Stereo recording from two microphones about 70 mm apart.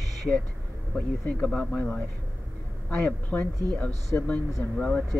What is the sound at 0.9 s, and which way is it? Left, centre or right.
Speech, centre.